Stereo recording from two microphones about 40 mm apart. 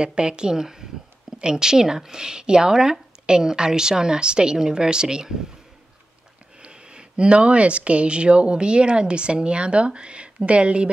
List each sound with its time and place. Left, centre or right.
0.0 s speech: right
6.6 s speech: right